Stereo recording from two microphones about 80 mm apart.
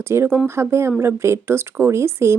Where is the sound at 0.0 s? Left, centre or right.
Right.